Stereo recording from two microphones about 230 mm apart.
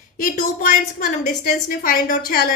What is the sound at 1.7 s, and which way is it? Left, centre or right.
Speech, left.